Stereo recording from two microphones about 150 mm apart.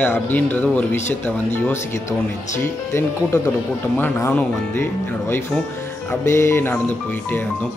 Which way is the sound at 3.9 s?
10° left (ahead or behind).